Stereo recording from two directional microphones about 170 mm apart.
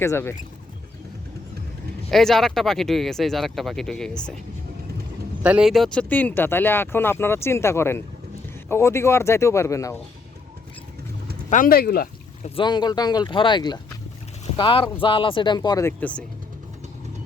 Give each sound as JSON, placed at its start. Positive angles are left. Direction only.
{"t": 0.0, "sound": "speech", "side_deg": 15}
{"t": 2.0, "sound": "speech", "side_deg": 0}
{"t": 5.4, "sound": "speech", "side_deg": -5}
{"t": 11.4, "sound": "speech", "side_deg": 50}
{"t": 12.5, "sound": "speech", "side_deg": 25}